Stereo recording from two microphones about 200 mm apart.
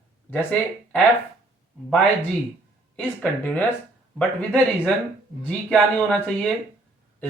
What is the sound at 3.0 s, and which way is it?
Speech, 10° left (ahead or behind).